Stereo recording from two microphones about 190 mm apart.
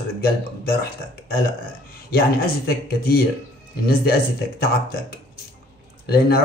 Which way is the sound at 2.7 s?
55° left (ahead or behind).